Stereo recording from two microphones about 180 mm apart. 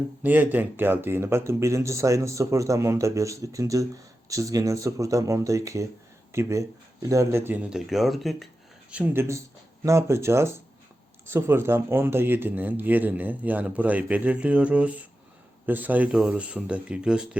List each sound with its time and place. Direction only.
0.2 s speech: 10° right (ahead or behind)